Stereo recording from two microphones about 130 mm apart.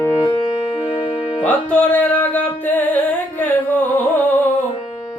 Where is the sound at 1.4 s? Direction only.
10° left (ahead or behind).